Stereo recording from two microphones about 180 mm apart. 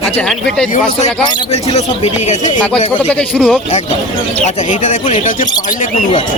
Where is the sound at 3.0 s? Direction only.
5° left (ahead or behind).